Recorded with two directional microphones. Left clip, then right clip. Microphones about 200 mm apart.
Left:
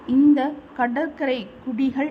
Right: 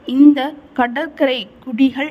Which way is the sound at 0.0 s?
50° right (ahead or behind).